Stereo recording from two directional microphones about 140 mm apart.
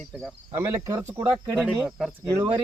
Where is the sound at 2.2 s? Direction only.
25° right (ahead or behind).